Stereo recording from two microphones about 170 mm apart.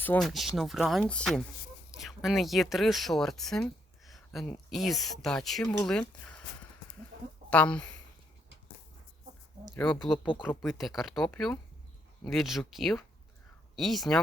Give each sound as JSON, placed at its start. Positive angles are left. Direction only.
{"t": 0.2, "sound": "speech", "side_deg": 0}
{"t": 7.1, "sound": "a sound", "side_deg": -70}
{"t": 7.5, "sound": "speech", "side_deg": 5}
{"t": 9.7, "sound": "speech", "side_deg": 5}